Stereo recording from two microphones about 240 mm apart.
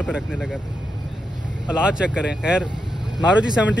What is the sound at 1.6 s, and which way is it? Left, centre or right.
Speech, centre.